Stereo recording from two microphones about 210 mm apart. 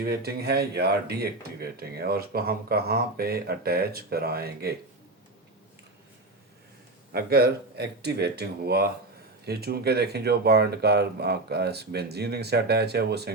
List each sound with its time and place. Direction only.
0.0 s speech: 50° right (ahead or behind)
7.1 s speech: 45° right (ahead or behind)